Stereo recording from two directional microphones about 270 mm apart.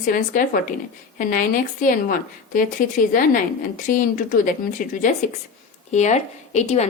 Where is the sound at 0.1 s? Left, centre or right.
Left.